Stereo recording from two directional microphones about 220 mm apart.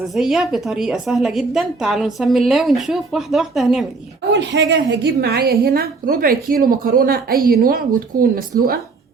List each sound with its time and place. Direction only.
0.2 s a woman's voice: centre (ahead or behind)
4.3 s a woman's voice: 55° right (ahead or behind)